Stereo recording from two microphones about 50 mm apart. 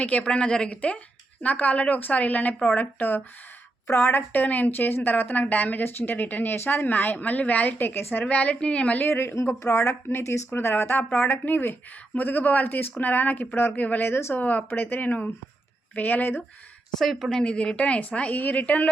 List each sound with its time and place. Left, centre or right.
0.0 s a woman's voice: left
3.9 s speech: left
4.3 s speech: left
7.8 s speech: left
8.3 s a woman's voice: left
9.0 s speech: left
9.3 s speech: left
9.6 s speech: left
14.0 s speech: left
14.3 s speech: left
17.0 s speech: centre
17.4 s a woman's voice: left